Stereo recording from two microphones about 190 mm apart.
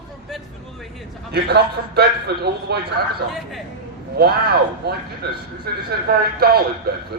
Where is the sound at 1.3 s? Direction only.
60° right (ahead or behind).